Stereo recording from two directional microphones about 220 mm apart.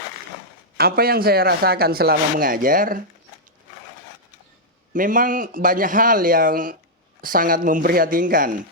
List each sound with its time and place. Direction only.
0.8 s speech: 45° right (ahead or behind)
4.9 s a man's voice: 40° right (ahead or behind)